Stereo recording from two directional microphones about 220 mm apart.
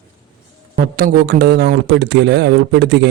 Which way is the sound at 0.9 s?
45° right (ahead or behind).